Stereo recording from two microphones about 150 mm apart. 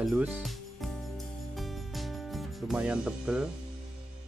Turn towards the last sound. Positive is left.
turn(degrees=-5)  # may be behind; listen again after turning